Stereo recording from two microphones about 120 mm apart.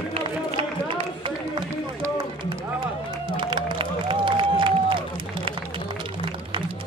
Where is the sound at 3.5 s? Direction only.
45° right (ahead or behind).